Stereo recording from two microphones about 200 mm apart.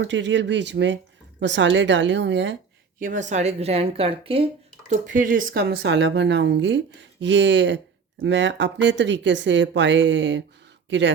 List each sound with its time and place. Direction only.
0.0 s speech: 65° right (ahead or behind)
3.0 s a woman's voice: 40° right (ahead or behind)
4.9 s speech: 40° right (ahead or behind)
5.8 s speech: 65° right (ahead or behind)